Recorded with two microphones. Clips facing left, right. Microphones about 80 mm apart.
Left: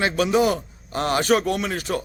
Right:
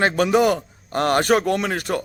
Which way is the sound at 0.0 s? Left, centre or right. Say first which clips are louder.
Right 2 dB; right.